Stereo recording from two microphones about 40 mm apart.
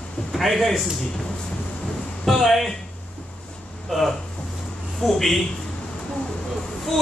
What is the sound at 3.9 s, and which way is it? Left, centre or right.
A man's voice, centre.